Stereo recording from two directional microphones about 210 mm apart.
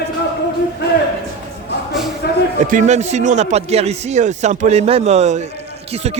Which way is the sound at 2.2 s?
50° left (ahead or behind).